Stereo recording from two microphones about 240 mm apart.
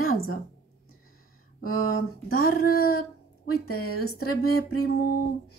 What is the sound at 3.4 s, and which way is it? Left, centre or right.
Speech, left.